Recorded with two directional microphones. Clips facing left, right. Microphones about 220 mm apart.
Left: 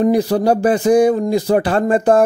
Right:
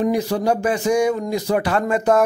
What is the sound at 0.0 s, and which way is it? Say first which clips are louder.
A man's voice: left 5 dB; 35° left (ahead or behind).